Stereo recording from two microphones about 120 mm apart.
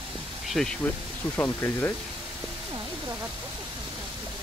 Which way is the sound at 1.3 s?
20° left (ahead or behind).